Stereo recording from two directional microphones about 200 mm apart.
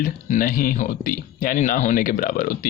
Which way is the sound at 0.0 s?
45° left (ahead or behind).